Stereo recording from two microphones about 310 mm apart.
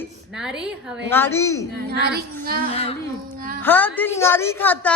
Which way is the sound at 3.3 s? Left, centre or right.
Right.